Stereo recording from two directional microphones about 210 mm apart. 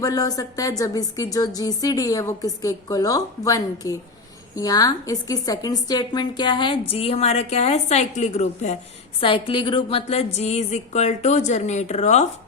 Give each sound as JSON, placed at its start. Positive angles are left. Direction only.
{"t": 0.0, "sound": "a woman's voice", "side_deg": 15}